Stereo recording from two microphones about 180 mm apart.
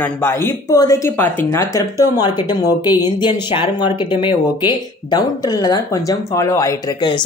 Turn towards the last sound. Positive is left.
turn(degrees=20)  # may be behind; listen again after turning